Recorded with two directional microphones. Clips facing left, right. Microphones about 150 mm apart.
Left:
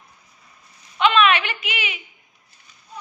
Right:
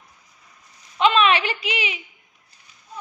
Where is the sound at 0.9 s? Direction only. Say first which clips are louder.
Even; 35° right (ahead or behind).